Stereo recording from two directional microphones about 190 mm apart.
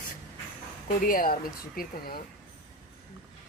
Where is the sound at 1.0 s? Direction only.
50° left (ahead or behind).